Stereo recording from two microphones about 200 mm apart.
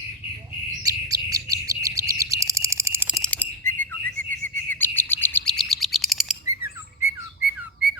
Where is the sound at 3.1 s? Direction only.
5° left (ahead or behind).